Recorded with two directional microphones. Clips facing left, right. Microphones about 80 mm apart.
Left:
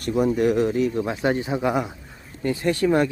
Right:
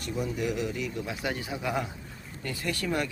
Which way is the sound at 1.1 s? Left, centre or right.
Left.